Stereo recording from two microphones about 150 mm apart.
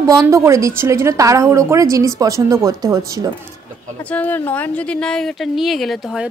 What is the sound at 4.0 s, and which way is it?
Speech, 10° left (ahead or behind).